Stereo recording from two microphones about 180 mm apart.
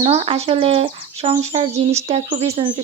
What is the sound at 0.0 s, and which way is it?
Speech, 30° right (ahead or behind).